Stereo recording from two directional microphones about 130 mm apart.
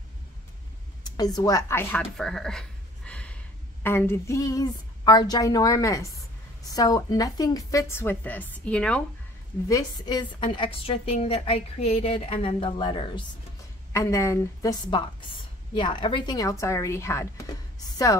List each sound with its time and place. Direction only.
1.0 s a woman's voice: 30° left (ahead or behind)
2.0 s speech: 5° left (ahead or behind)
3.1 s a sound: 10° left (ahead or behind)
3.8 s speech: 15° left (ahead or behind)
9.7 s a woman's voice: 30° left (ahead or behind)
13.9 s speech: 20° left (ahead or behind)